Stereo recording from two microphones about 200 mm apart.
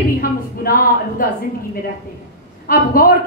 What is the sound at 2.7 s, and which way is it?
Speech, 50° left (ahead or behind).